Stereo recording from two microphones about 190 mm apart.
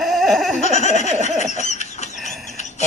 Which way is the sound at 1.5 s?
35° left (ahead or behind).